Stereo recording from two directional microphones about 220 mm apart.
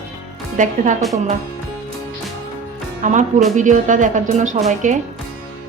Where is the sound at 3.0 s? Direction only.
35° right (ahead or behind).